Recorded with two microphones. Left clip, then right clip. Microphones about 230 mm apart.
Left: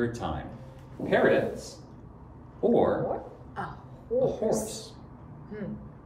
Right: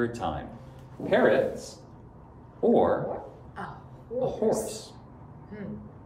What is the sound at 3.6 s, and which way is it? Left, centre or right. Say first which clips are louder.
Speech: left 2 dB; centre.